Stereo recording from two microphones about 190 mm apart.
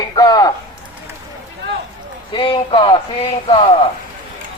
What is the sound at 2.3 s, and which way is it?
A man's voice, 25° left (ahead or behind).